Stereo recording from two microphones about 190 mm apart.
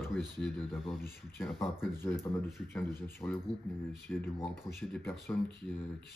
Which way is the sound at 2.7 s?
10° left (ahead or behind).